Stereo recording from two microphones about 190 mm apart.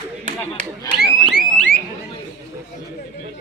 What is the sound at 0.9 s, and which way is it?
Speech, 20° left (ahead or behind).